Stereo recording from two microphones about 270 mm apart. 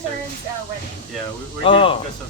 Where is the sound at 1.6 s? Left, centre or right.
Centre.